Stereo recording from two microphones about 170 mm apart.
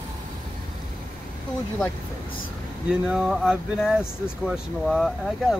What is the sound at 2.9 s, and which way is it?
Speech, 5° right (ahead or behind).